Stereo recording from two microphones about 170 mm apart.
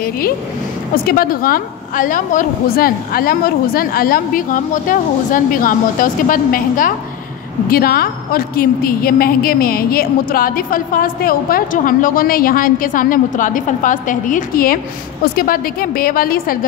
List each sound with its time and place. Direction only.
0.9 s a woman's voice: 60° left (ahead or behind)